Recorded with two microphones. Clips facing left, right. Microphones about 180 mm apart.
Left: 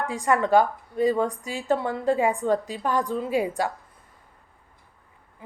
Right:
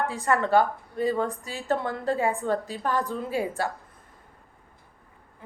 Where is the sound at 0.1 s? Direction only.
15° left (ahead or behind).